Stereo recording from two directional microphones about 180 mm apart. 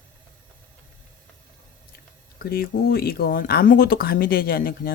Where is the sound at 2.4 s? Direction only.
55° left (ahead or behind).